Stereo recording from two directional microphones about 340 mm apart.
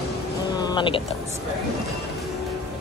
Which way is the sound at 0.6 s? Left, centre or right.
Centre.